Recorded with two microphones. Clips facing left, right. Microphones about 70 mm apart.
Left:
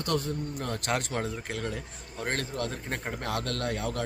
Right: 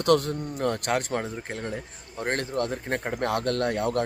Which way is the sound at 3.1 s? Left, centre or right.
Right.